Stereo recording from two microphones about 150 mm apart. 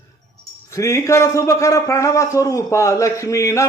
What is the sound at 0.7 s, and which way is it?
A man's voice, 20° left (ahead or behind).